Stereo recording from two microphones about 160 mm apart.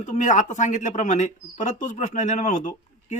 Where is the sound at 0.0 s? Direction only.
50° left (ahead or behind).